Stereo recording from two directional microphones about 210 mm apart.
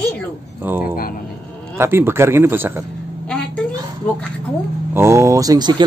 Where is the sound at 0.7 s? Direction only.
10° right (ahead or behind).